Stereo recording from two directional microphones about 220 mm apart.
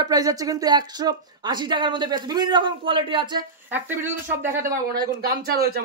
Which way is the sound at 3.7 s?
10° right (ahead or behind).